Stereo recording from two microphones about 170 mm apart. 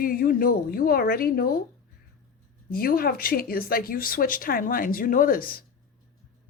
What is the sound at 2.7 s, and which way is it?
Speech, 60° left (ahead or behind).